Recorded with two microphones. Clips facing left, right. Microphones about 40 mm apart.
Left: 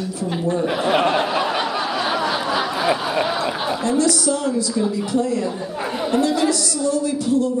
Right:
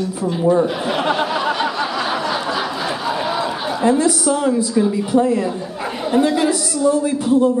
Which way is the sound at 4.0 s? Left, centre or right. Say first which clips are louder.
Right 2 dB; right.